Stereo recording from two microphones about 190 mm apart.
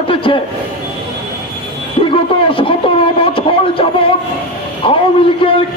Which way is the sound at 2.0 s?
25° left (ahead or behind).